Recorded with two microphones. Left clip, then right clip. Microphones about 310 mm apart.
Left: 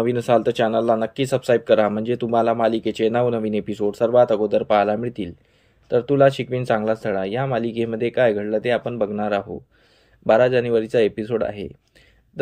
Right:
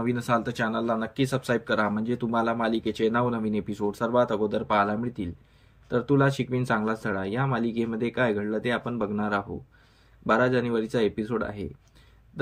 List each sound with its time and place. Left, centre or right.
0.1 s speech: centre